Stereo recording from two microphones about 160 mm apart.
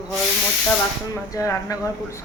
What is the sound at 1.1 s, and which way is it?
Speech, 20° left (ahead or behind).